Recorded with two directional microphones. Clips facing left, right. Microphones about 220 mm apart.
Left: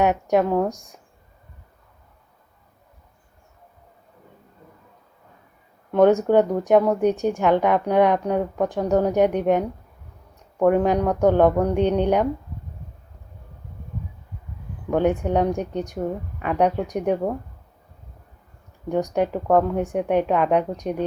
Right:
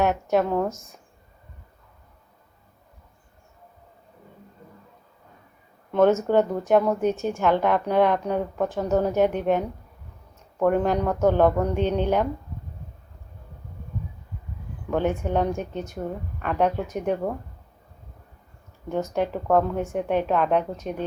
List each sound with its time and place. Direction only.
0.1 s a woman's voice: 15° left (ahead or behind)
5.9 s a woman's voice: 15° left (ahead or behind)
14.8 s a woman's voice: 15° left (ahead or behind)
18.9 s a woman's voice: 15° left (ahead or behind)